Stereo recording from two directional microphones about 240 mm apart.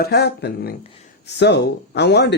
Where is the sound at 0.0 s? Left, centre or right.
Left.